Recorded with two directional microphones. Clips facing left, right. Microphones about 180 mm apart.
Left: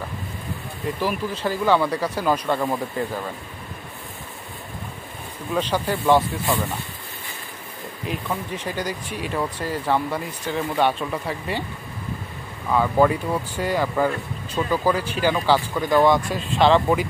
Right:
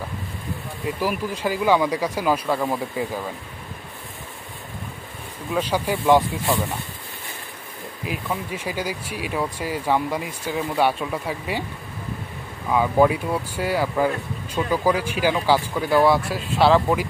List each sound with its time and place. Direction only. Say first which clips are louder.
0.8 s speech: even; 10° right (ahead or behind)
5.5 s speech: even; 10° right (ahead or behind)
8.0 s speech: even; 5° right (ahead or behind)
12.7 s speech: even; 10° right (ahead or behind)